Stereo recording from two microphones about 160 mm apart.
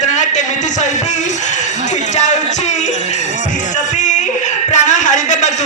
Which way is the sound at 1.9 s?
45° left (ahead or behind).